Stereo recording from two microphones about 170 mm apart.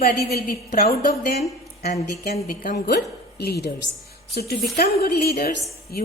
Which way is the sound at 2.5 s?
60° left (ahead or behind).